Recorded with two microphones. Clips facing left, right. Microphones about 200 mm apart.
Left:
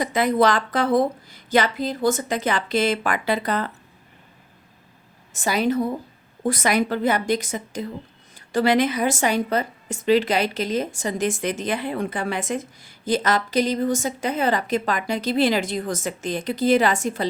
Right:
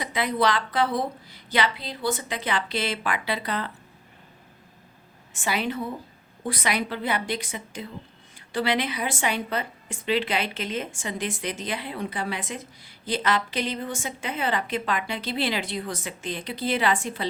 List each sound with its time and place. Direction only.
0.0 s a woman's voice: 45° left (ahead or behind)
5.3 s a woman's voice: 40° left (ahead or behind)